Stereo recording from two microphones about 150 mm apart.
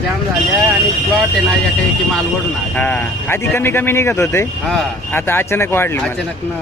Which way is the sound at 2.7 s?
10° left (ahead or behind).